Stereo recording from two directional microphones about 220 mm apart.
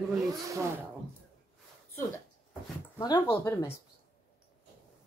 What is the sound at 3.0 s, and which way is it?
Speech, 20° left (ahead or behind).